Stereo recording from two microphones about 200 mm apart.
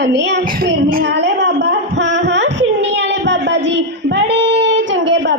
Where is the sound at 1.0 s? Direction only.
60° right (ahead or behind).